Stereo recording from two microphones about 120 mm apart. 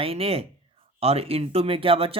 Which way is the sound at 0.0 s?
55° right (ahead or behind).